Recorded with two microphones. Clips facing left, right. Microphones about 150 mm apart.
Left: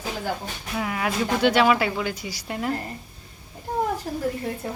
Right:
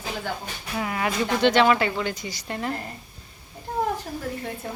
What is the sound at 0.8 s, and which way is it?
A woman's voice, centre (ahead or behind).